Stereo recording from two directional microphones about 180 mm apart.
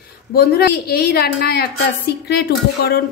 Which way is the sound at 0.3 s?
60° left (ahead or behind).